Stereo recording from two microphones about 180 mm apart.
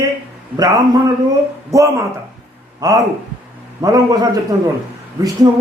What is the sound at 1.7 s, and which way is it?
A man's voice, 15° right (ahead or behind).